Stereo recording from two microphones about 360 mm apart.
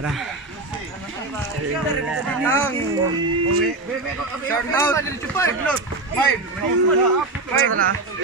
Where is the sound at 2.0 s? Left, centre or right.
Centre.